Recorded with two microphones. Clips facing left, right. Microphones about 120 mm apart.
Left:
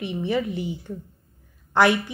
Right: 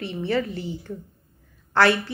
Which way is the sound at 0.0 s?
15° left (ahead or behind).